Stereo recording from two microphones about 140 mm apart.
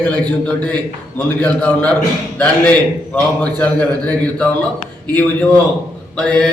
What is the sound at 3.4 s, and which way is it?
A man's voice, 10° left (ahead or behind).